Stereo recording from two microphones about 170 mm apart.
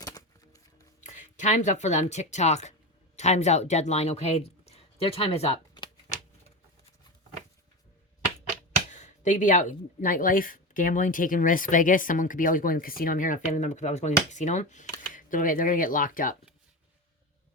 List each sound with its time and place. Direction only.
0.0 s a sound: 20° left (ahead or behind)
1.0 s speech: 45° left (ahead or behind); by 6.1 s 25° left (ahead or behind)
8.9 s speech: 45° left (ahead or behind)